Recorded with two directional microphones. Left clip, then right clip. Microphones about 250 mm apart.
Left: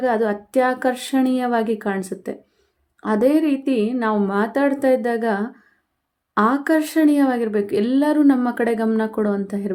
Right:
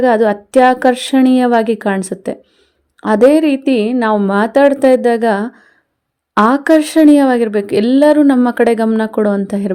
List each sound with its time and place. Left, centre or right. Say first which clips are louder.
0.0 s speech: right 9 dB; right